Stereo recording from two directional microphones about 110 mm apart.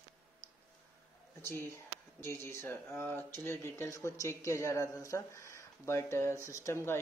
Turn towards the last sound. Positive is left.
turn(degrees=25)  # may be behind; listen again after turning